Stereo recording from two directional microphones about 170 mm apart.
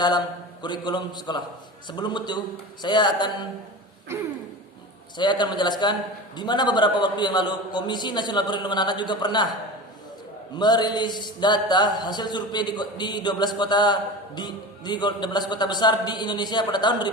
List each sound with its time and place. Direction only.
0.6 s a man's voice: 25° left (ahead or behind)
5.1 s a man's voice: 25° left (ahead or behind)
10.6 s a man's voice: 25° left (ahead or behind)